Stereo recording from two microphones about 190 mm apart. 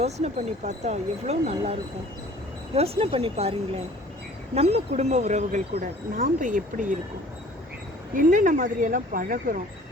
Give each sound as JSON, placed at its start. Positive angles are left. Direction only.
{"t": 0.0, "sound": "speech", "side_deg": -35}
{"t": 2.7, "sound": "speech", "side_deg": -30}
{"t": 4.5, "sound": "speech", "side_deg": -35}
{"t": 8.1, "sound": "speech", "side_deg": -45}